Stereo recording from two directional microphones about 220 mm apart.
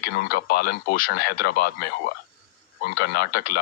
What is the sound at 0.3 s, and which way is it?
Speech, 45° left (ahead or behind).